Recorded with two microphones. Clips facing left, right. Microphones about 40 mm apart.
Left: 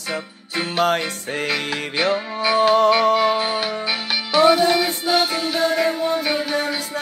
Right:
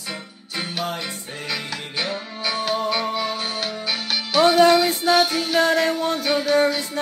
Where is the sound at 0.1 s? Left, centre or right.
Centre.